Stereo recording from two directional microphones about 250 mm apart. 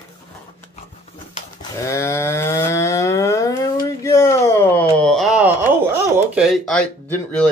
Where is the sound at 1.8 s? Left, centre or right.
Centre.